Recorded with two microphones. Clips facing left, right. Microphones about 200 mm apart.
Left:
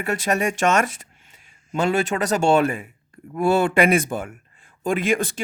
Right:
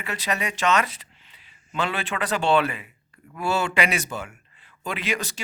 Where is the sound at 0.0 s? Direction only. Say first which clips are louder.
Left 7 dB; 50° left (ahead or behind).